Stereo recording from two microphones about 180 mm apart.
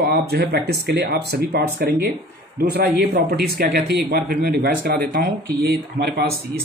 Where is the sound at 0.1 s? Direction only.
60° right (ahead or behind).